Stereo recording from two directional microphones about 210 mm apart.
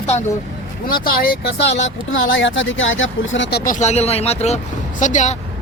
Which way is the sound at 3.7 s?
35° left (ahead or behind).